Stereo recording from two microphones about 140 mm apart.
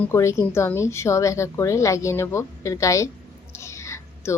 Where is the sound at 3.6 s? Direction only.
20° left (ahead or behind).